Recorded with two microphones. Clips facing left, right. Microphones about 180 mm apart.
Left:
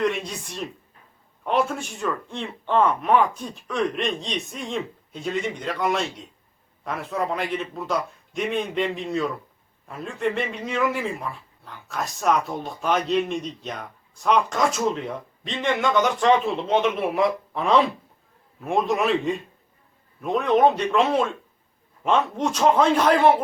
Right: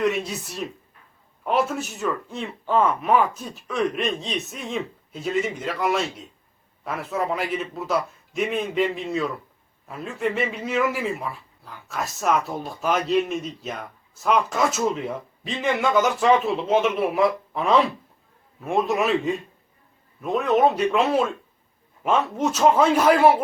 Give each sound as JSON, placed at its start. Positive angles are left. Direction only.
{"t": 0.0, "sound": "a man's voice", "side_deg": -5}